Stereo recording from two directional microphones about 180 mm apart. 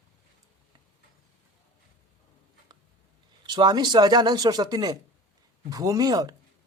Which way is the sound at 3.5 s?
25° right (ahead or behind).